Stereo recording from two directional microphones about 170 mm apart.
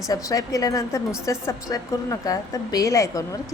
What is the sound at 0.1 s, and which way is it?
A woman's voice, 20° left (ahead or behind).